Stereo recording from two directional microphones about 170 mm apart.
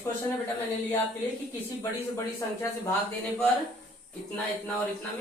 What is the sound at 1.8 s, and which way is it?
Speech, 15° left (ahead or behind).